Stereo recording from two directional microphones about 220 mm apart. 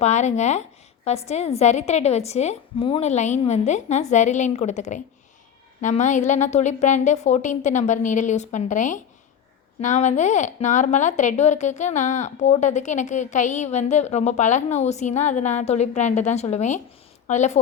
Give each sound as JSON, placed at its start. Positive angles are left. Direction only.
{"t": 0.0, "sound": "a woman's voice", "side_deg": 30}